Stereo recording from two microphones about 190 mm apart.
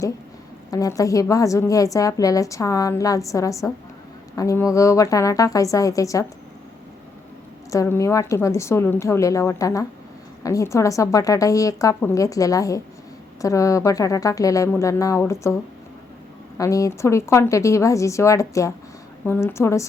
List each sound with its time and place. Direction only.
0.7 s a woman's voice: 20° left (ahead or behind)
7.7 s a woman's voice: 15° left (ahead or behind)
16.6 s a woman's voice: 15° left (ahead or behind)